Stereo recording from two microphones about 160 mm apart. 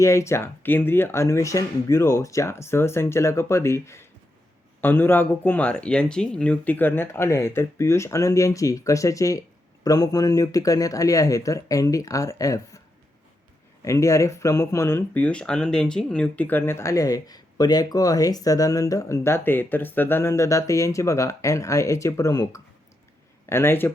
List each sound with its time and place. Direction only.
0.0 s speech: 20° left (ahead or behind)
13.8 s speech: 20° left (ahead or behind)